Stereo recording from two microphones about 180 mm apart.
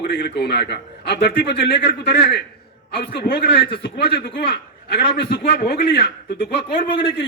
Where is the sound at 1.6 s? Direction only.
75° left (ahead or behind).